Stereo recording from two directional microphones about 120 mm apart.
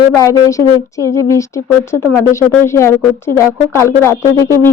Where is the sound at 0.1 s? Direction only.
25° left (ahead or behind).